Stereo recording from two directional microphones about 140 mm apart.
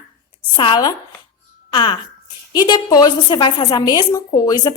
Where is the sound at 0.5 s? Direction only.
35° left (ahead or behind).